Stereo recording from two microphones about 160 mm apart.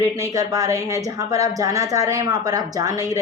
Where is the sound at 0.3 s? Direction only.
20° right (ahead or behind).